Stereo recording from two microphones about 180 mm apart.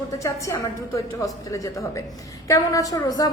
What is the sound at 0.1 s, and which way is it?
A woman's voice, 15° left (ahead or behind).